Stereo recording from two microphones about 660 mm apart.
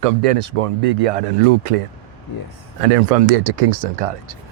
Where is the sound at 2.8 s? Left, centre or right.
Right.